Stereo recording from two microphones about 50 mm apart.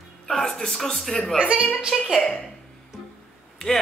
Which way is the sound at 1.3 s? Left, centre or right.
Right.